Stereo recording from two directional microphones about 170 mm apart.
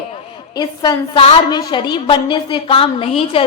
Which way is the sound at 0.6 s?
25° left (ahead or behind).